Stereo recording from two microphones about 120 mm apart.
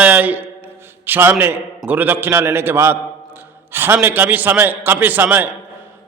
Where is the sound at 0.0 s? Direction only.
15° right (ahead or behind).